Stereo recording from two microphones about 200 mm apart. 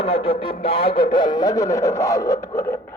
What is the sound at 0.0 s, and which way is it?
Speech, 30° left (ahead or behind).